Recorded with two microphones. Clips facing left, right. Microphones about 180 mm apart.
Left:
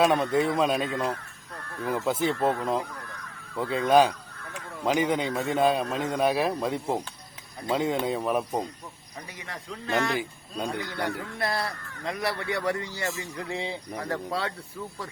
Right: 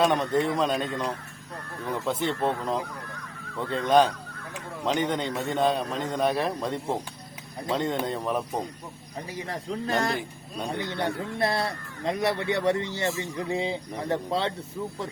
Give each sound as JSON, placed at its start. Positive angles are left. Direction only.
{"t": 0.0, "sound": "speech", "side_deg": 5}
{"t": 9.5, "sound": "speech", "side_deg": -35}
{"t": 10.8, "sound": "speech", "side_deg": -25}